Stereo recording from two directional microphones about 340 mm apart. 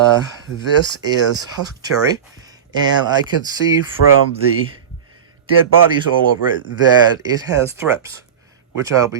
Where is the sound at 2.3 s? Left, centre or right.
Centre.